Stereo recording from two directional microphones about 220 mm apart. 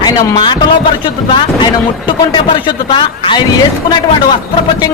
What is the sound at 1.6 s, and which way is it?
A man's voice, 20° left (ahead or behind).